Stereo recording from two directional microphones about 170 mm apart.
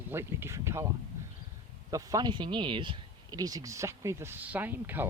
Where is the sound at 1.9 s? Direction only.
20° right (ahead or behind).